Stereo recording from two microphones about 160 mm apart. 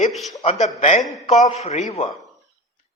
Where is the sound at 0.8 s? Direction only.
50° left (ahead or behind).